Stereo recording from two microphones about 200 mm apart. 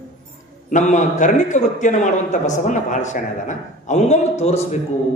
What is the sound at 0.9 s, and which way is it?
A man's voice, 40° left (ahead or behind).